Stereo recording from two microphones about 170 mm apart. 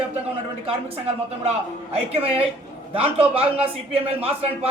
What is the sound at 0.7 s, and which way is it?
A man's voice, 35° right (ahead or behind).